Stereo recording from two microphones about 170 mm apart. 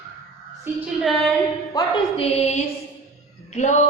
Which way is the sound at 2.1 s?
35° left (ahead or behind).